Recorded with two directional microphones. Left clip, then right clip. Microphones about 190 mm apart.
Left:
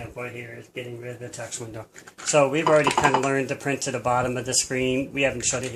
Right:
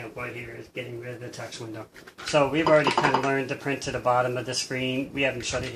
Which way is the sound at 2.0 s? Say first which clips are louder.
Left 2 dB; 40° left (ahead or behind).